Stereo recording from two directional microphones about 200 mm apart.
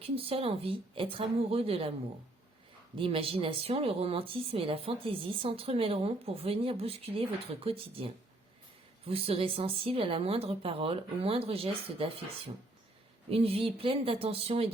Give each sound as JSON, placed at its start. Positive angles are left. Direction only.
{"t": 0.0, "sound": "speech", "side_deg": -30}
{"t": 3.0, "sound": "speech", "side_deg": -25}
{"t": 13.3, "sound": "speech", "side_deg": -30}